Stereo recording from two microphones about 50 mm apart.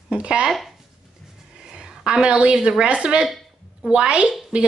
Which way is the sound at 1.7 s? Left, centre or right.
Centre.